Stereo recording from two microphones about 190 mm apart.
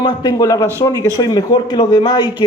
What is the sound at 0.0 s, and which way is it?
A man's voice, 25° left (ahead or behind).